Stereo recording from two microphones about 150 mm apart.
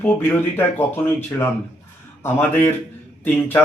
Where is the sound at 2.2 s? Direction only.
15° left (ahead or behind).